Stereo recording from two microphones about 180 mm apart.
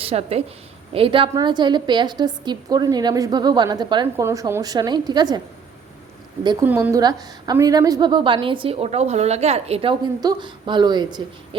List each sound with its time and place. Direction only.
0.0 s a woman's voice: 35° right (ahead or behind)
6.4 s a woman's voice: 25° right (ahead or behind)
6.7 s a woman's voice: 10° right (ahead or behind)